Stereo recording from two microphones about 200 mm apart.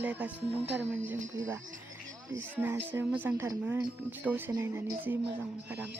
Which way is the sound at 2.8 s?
10° right (ahead or behind).